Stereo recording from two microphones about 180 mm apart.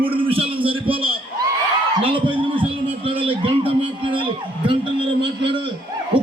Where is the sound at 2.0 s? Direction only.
30° right (ahead or behind).